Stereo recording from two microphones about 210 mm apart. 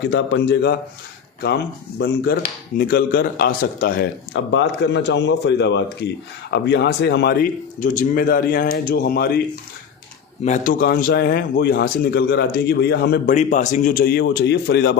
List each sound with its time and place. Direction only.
0.1 s a man's voice: 55° left (ahead or behind)
4.5 s a man's voice: 55° left (ahead or behind)
10.4 s a man's voice: 35° left (ahead or behind)
13.2 s a man's voice: 35° left (ahead or behind); by 14.9 s 55° left (ahead or behind)